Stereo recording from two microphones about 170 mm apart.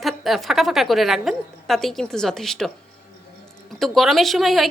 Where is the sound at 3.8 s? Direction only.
Centre (ahead or behind).